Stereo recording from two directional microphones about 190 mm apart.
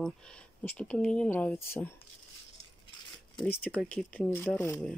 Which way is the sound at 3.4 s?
5° left (ahead or behind).